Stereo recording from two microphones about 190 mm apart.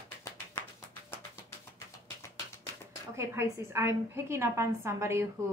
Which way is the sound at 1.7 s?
15° left (ahead or behind).